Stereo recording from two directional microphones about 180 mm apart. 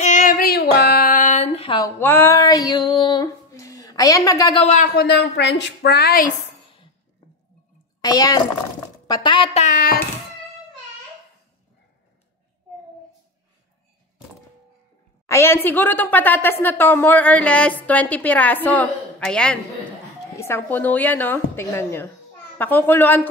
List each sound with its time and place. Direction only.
0.0 s female singing: 45° left (ahead or behind)
2.0 s female singing: 10° left (ahead or behind)
4.6 s speech: 40° left (ahead or behind)
4.8 s a woman's voice: 65° left (ahead or behind)
8.0 s a child's voice: 20° left (ahead or behind); by 9.9 s 50° left (ahead or behind)
15.2 s a woman's voice: 15° left (ahead or behind)